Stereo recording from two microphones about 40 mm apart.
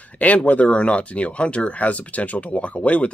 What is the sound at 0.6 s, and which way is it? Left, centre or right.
Speech, left.